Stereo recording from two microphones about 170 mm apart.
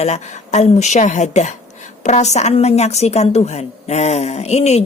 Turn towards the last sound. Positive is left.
turn(degrees=40)  # may be behind; listen again after turning